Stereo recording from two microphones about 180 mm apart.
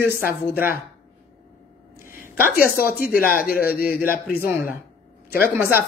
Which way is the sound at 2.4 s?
55° left (ahead or behind).